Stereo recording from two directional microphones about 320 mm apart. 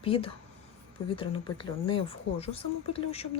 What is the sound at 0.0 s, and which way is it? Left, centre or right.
Speech, centre.